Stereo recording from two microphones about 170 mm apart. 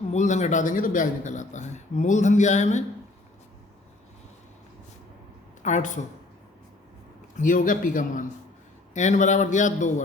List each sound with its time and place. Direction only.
0.1 s a man's voice: 45° left (ahead or behind)
5.6 s a man's voice: 45° left (ahead or behind)
7.3 s a man's voice: 50° left (ahead or behind)